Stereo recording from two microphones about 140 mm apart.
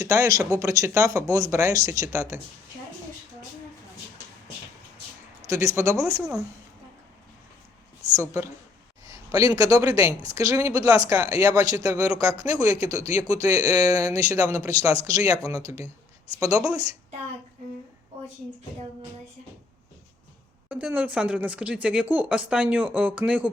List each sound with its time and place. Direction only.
0.0 s speech: 20° right (ahead or behind)
5.4 s speech: 20° right (ahead or behind)
8.1 s speech: 20° right (ahead or behind)
9.0 s a sound: 25° right (ahead or behind)
9.6 s speech: 25° right (ahead or behind)
20.7 s speech: 10° right (ahead or behind)